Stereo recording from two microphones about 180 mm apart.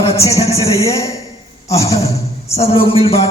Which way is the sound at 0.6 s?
20° left (ahead or behind).